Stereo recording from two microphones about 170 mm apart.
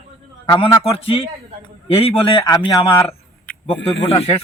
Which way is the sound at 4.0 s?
35° left (ahead or behind).